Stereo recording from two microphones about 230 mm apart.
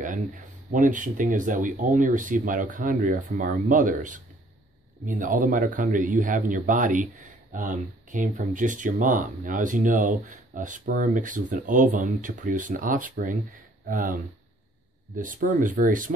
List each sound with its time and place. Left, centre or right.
0.0 s speech: right